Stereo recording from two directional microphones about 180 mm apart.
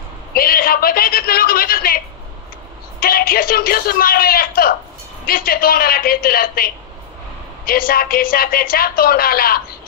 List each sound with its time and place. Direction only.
0.3 s a woman's voice: 55° left (ahead or behind)
3.0 s a woman's voice: 55° left (ahead or behind)